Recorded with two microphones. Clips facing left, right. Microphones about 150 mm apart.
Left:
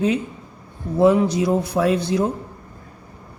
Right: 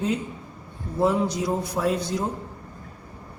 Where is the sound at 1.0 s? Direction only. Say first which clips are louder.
Left 7 dB; 70° left (ahead or behind).